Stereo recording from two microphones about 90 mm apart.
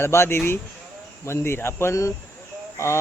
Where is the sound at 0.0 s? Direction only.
30° left (ahead or behind).